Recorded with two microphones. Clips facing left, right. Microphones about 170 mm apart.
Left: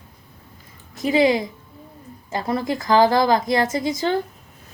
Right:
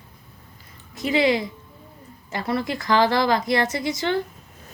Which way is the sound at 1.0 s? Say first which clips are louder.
Left 3 dB; 20° left (ahead or behind).